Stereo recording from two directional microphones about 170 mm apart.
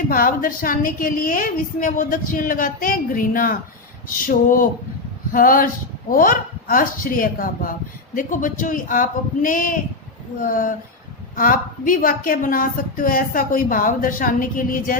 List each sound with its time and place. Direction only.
0.1 s a woman's voice: 55° left (ahead or behind)